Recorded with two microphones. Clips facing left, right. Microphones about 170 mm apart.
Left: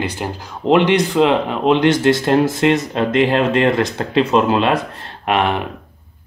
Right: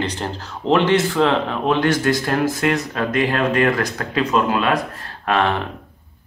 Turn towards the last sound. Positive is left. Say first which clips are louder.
# left 2 dB
turn(degrees=15)  # may be behind; listen again after turning